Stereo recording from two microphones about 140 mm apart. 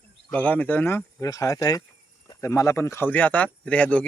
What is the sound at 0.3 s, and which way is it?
Speech, 10° left (ahead or behind).